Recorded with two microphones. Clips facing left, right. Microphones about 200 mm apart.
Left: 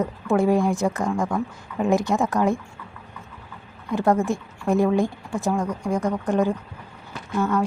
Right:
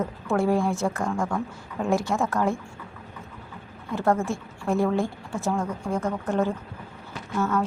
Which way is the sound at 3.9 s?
15° left (ahead or behind).